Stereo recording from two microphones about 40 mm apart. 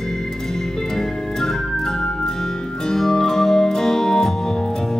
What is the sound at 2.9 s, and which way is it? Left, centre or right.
Music, centre.